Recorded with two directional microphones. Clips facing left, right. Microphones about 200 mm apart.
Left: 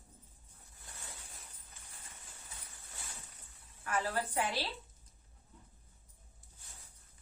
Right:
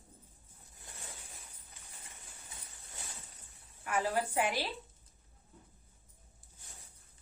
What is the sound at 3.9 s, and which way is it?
Speech, 15° right (ahead or behind).